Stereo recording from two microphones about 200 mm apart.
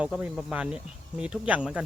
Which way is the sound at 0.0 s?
5° right (ahead or behind).